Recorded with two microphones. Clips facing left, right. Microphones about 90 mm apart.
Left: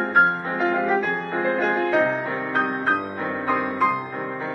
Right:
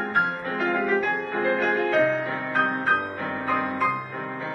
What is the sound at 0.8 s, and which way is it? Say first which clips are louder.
Music: left 2 dB; 25° left (ahead or behind).